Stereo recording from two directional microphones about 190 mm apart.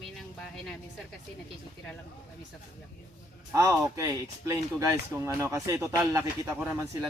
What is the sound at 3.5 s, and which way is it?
Speech, 15° right (ahead or behind).